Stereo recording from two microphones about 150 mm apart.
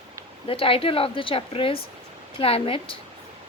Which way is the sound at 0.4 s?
35° left (ahead or behind).